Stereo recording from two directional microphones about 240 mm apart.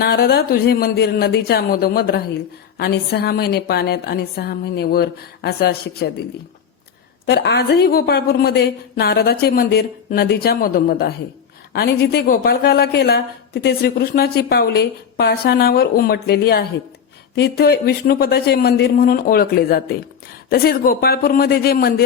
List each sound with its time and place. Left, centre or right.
0.0 s a woman's voice: left
7.3 s a woman's voice: left